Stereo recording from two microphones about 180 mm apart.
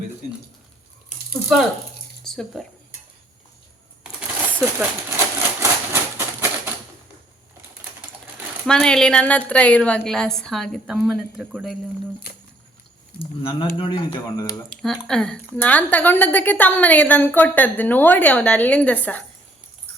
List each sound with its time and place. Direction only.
1.1 s a sound: 40° left (ahead or behind)
2.2 s speech: centre (ahead or behind)
4.8 s typewriter: 15° right (ahead or behind)
8.6 s a woman's voice: 5° left (ahead or behind)
13.1 s speech: 30° left (ahead or behind)
14.7 s a woman's voice: 5° left (ahead or behind)